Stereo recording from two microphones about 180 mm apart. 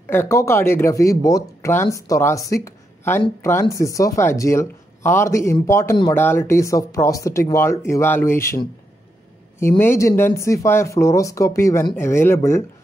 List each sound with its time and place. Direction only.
0.0 s speech: 15° left (ahead or behind)